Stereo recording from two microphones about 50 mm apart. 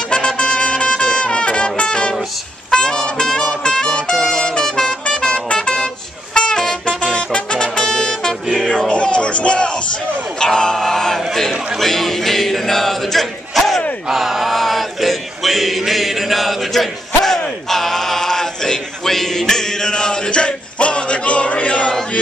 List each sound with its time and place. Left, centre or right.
0.1 s music: left
10.4 s a sound: centre
14.0 s chant: centre
17.6 s male singing: centre; by 21.9 s left